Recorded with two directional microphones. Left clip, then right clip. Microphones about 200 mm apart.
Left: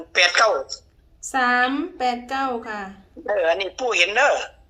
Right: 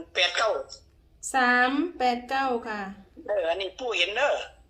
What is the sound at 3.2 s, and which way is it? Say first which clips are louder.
Speech: left 6 dB; 55° left (ahead or behind).